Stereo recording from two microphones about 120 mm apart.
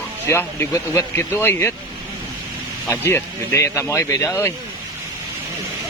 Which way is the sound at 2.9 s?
20° left (ahead or behind).